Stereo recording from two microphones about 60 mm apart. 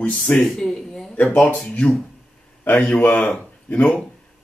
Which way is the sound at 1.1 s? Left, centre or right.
Left.